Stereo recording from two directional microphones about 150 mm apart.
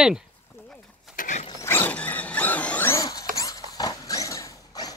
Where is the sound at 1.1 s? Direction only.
60° left (ahead or behind).